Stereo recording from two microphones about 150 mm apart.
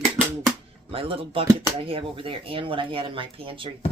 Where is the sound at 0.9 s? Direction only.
40° right (ahead or behind).